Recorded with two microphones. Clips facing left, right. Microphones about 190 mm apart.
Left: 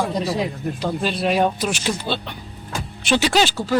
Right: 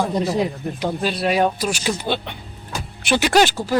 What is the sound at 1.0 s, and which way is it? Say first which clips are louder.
Speech: even; 5° right (ahead or behind).